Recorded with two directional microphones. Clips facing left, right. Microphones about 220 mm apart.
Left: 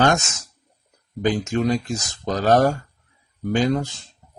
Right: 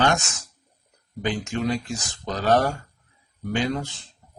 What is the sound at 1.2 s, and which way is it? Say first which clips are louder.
Speech: left 5 dB; 40° left (ahead or behind).